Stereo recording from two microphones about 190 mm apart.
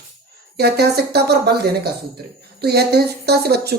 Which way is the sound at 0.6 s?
60° right (ahead or behind).